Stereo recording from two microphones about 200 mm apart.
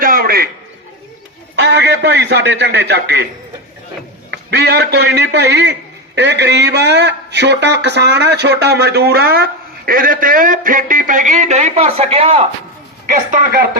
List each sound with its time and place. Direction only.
0.0 s a sound: 45° right (ahead or behind)
1.5 s a man's voice: 60° right (ahead or behind)
4.3 s a man's voice: 55° right (ahead or behind); by 12.5 s 30° right (ahead or behind)
13.1 s a man's voice: 45° right (ahead or behind)